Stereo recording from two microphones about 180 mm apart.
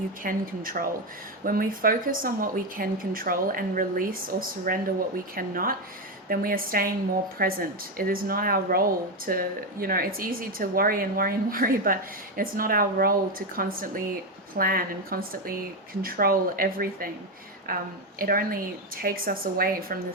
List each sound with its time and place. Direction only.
0.2 s a woman's voice: 50° right (ahead or behind)